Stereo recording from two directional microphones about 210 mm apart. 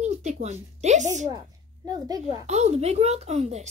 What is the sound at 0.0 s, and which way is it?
Speech, 35° right (ahead or behind).